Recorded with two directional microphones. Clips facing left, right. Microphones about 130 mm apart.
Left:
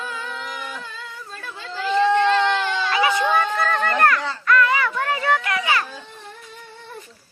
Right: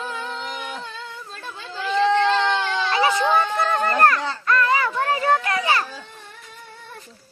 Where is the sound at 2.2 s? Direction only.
20° right (ahead or behind).